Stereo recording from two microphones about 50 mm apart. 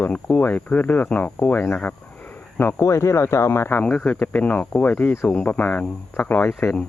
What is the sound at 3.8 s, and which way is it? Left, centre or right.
Speech, left.